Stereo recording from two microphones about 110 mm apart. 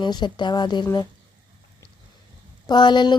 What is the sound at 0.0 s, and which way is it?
Speech, 45° left (ahead or behind).